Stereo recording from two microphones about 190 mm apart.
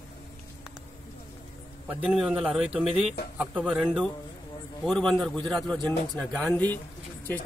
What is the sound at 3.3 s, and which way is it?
A man's voice, 5° right (ahead or behind).